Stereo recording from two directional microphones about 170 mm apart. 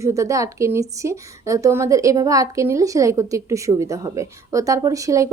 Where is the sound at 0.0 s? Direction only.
20° right (ahead or behind).